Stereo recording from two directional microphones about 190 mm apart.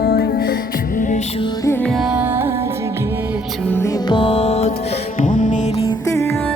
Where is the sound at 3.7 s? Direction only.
15° left (ahead or behind); by 6.0 s 30° left (ahead or behind).